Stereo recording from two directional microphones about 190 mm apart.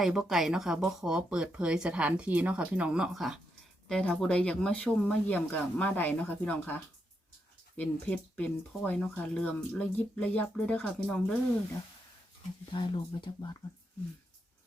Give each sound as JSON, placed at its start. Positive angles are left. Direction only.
{"t": 0.0, "sound": "speech", "side_deg": 0}
{"t": 12.7, "sound": "speech", "side_deg": 25}